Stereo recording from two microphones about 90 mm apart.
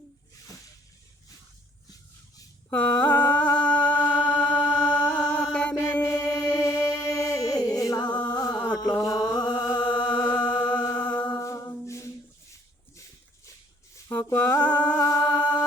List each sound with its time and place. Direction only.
2.6 s music: 20° left (ahead or behind)
6.0 s music: 30° left (ahead or behind)
8.3 s a sound: 40° left (ahead or behind)
9.0 s mantra: 40° left (ahead or behind)
10.3 s music: 50° left (ahead or behind)
10.9 s music: 15° left (ahead or behind)
11.3 s a capella: 30° left (ahead or behind)
14.1 s mantra: 20° left (ahead or behind)
15.2 s singing: 15° left (ahead or behind)